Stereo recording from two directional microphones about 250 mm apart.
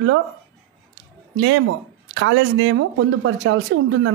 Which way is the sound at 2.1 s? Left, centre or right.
Right.